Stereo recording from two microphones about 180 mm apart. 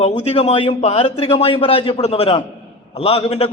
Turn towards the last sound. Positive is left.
turn(degrees=35)  # may be behind; listen again after turning